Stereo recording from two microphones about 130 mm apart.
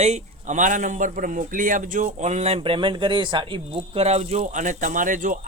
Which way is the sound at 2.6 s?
40° right (ahead or behind).